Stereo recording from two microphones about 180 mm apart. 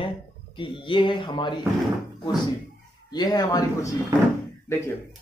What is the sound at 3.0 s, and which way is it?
Speech, 20° left (ahead or behind).